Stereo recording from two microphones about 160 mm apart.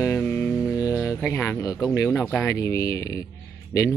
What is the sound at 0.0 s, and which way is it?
Mantra, 15° left (ahead or behind).